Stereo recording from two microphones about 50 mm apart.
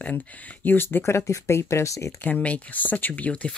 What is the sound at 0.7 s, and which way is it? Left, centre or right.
Speech, left.